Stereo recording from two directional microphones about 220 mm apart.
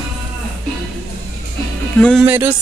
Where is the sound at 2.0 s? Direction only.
5° left (ahead or behind).